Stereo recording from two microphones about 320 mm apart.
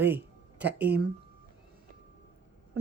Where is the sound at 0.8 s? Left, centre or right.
Right.